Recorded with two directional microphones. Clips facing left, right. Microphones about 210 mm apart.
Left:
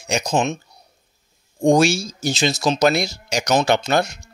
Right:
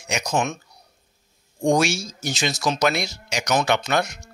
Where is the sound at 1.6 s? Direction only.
30° left (ahead or behind).